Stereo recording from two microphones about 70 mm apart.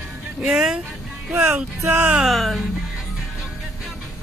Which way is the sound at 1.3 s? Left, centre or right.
Centre.